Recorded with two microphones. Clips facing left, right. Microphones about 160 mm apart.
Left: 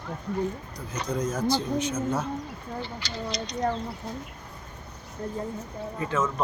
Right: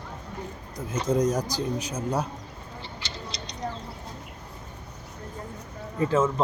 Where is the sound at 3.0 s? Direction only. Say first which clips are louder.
Left 6 dB; 25° right (ahead or behind).